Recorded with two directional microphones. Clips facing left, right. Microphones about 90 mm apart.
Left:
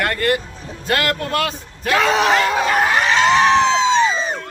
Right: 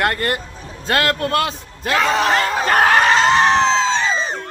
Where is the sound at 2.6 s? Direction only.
55° right (ahead or behind).